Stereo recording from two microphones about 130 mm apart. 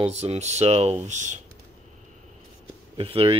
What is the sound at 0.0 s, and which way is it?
Speech, 55° right (ahead or behind).